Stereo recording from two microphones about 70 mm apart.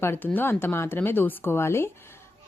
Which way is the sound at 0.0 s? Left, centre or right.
Left.